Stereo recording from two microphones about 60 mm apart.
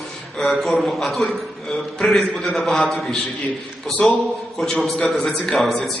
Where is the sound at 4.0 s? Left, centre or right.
Centre.